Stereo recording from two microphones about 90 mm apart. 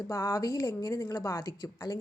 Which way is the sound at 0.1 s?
45° left (ahead or behind).